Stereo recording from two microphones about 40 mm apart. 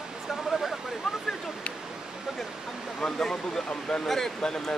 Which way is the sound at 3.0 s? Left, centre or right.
Centre.